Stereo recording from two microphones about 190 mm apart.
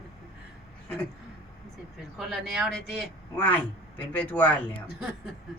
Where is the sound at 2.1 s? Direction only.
Centre (ahead or behind).